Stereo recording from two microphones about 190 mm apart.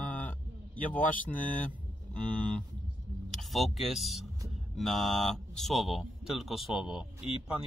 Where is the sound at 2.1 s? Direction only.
5° left (ahead or behind).